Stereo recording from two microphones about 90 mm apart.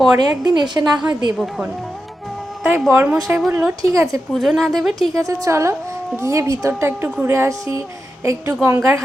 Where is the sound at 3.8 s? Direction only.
40° right (ahead or behind).